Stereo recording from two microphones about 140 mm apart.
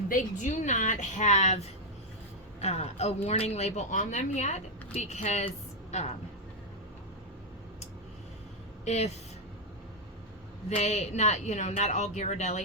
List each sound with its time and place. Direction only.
0.1 s speech: 65° left (ahead or behind)
8.8 s speech: 50° left (ahead or behind)
10.7 s speech: 50° left (ahead or behind)